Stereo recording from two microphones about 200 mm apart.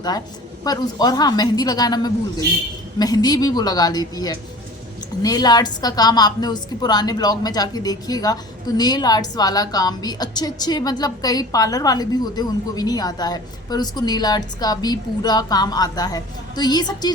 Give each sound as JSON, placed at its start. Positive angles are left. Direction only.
{"t": 0.6, "sound": "a woman's voice", "side_deg": 20}